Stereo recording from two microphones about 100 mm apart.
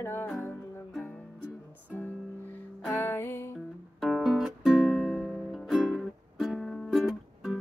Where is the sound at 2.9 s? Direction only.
20° left (ahead or behind).